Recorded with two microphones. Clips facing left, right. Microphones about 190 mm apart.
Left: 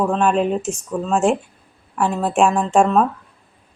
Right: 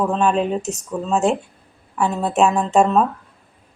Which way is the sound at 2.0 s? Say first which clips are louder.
Even; centre (ahead or behind).